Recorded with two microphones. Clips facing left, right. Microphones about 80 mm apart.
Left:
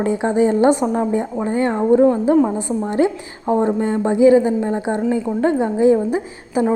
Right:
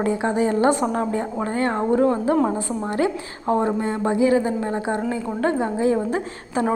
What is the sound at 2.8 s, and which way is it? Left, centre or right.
A woman's voice, left.